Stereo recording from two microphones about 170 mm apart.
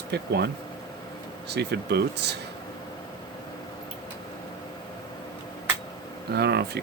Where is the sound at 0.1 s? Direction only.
70° right (ahead or behind).